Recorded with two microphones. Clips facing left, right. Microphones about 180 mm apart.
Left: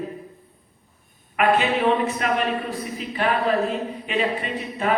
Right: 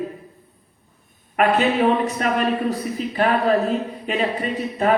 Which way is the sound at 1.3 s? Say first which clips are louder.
Right 2 dB; 40° right (ahead or behind).